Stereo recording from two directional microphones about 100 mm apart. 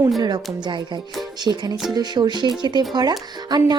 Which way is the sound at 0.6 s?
50° right (ahead or behind).